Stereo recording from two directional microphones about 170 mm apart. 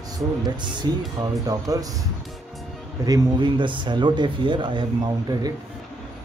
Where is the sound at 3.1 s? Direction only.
30° right (ahead or behind).